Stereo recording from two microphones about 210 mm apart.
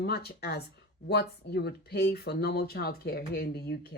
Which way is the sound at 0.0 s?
50° left (ahead or behind).